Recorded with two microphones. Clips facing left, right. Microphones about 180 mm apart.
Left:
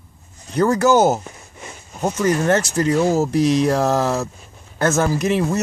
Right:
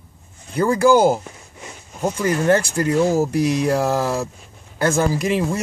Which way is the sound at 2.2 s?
10° right (ahead or behind).